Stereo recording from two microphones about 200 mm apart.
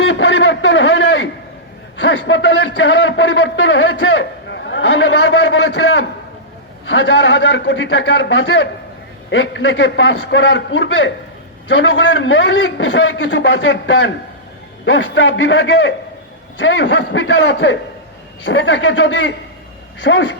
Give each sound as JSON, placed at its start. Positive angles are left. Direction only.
{"t": 0.0, "sound": "a sound", "side_deg": 65}
{"t": 2.0, "sound": "a man's voice", "side_deg": 65}
{"t": 6.8, "sound": "a man's voice", "side_deg": 65}
{"t": 14.8, "sound": "a man's voice", "side_deg": 75}